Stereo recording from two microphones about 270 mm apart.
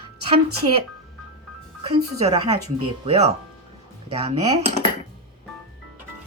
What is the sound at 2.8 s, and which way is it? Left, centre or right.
Speech, right.